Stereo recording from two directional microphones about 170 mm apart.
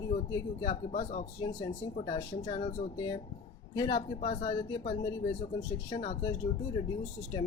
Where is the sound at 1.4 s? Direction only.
30° left (ahead or behind).